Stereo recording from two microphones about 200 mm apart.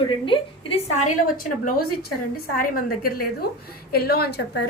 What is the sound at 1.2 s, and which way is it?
A woman's voice, 45° left (ahead or behind).